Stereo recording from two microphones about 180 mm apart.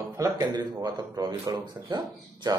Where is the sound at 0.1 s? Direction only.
20° right (ahead or behind).